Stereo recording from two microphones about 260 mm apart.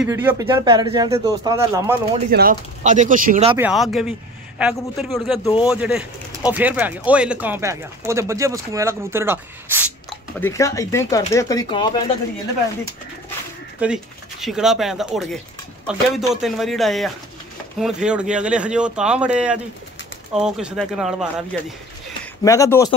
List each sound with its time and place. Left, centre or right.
0.0 s speech: centre
2.3 s speech: right
3.5 s speech: centre
5.4 s speech: centre
5.7 s speech: centre
10.4 s speech: centre
13.8 s speech: centre
16.3 s speech: centre
22.2 s speech: centre